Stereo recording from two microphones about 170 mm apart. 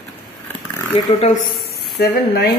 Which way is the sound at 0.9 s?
40° left (ahead or behind).